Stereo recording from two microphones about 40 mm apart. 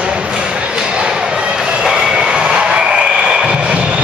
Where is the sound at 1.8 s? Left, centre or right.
Centre.